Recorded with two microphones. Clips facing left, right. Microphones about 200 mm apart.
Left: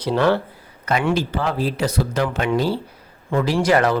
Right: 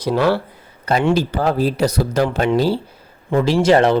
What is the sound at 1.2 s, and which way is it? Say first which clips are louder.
Speech: right 4 dB; 40° right (ahead or behind).